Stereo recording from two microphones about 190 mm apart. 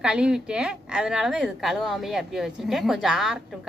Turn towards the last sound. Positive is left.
turn(degrees=0)  # may be behind; listen again after turning